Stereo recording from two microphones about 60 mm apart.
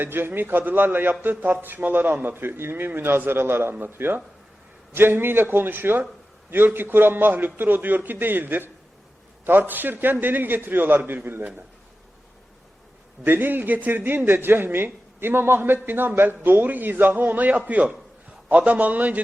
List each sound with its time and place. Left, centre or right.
0.0 s a man's voice: right
13.2 s a man's voice: right